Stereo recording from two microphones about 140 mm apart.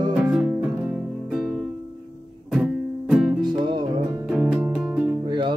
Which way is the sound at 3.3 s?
35° right (ahead or behind).